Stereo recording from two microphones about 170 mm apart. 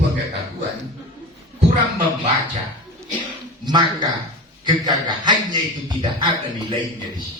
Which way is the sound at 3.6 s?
25° right (ahead or behind).